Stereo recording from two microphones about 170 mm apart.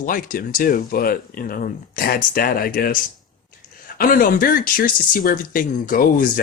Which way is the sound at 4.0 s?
55° left (ahead or behind).